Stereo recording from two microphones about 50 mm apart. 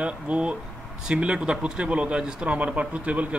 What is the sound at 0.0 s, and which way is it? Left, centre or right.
Speech, right.